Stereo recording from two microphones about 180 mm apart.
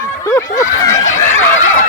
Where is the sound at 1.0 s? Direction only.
90° left.